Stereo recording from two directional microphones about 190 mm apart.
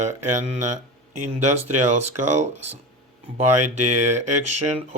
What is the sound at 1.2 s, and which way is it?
Speech, 40° right (ahead or behind).